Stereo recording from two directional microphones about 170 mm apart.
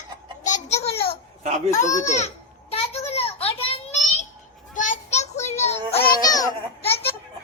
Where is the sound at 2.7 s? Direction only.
35° left (ahead or behind).